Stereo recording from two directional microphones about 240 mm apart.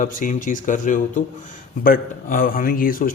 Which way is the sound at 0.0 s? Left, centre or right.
Left.